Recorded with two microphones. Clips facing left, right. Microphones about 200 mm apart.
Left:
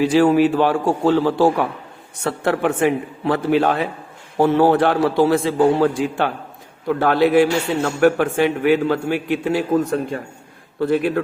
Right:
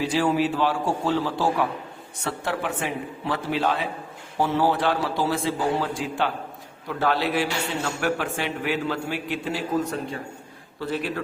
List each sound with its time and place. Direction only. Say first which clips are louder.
0.0 s a man's voice: left 8 dB; 60° left (ahead or behind)
10.8 s a man's voice: left 10 dB; 55° left (ahead or behind)